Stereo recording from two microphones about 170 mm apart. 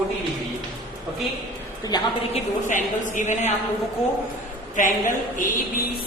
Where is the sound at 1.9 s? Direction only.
25° left (ahead or behind).